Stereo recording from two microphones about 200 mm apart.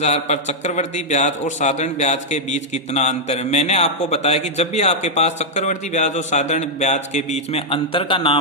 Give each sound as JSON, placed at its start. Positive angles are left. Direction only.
{"t": 0.0, "sound": "a man's voice", "side_deg": 35}